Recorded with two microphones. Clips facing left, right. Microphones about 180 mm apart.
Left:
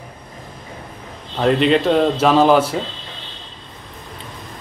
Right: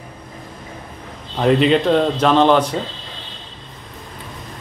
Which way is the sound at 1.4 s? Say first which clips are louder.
Right 1 dB; centre (ahead or behind).